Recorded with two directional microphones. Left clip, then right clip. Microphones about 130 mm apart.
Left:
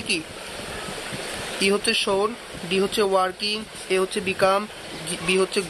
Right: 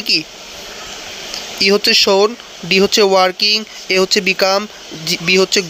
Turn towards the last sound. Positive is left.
turn(degrees=-50)  # may be behind; listen again after turning